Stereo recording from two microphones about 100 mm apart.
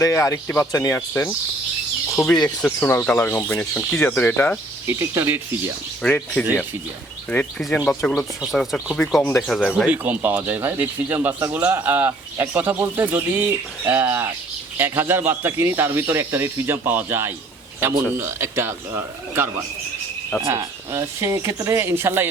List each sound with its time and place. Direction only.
0.0 s speech: 30° left (ahead or behind)
2.2 s speech: 5° right (ahead or behind)
2.6 s speech: 20° left (ahead or behind)
4.9 s speech: 30° right (ahead or behind)
6.0 s speech: 10° left (ahead or behind)
7.9 s speech: 5° left (ahead or behind)
9.8 s speech: 15° right (ahead or behind)